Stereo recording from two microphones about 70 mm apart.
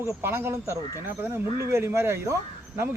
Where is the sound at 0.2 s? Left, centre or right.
Right.